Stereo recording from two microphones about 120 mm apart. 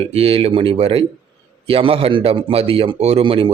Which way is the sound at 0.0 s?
55° right (ahead or behind).